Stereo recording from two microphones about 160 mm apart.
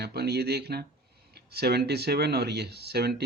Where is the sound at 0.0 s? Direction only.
90° right.